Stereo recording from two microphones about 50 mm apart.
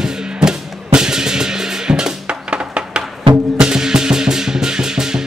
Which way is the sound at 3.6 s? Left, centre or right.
Centre.